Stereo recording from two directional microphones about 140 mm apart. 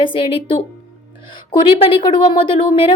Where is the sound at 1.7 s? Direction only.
40° left (ahead or behind).